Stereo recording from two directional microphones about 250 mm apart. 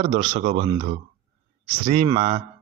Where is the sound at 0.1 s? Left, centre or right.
Right.